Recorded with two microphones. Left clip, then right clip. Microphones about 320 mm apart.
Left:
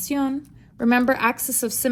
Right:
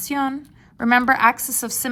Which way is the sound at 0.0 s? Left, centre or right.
Right.